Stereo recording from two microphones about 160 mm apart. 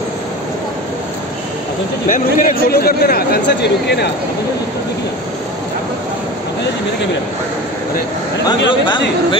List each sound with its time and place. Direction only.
2.0 s speech: 55° left (ahead or behind); by 4.1 s 90° left
8.6 s speech: 30° left (ahead or behind)